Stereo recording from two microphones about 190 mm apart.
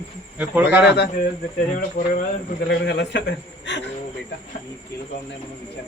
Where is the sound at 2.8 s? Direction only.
65° left (ahead or behind).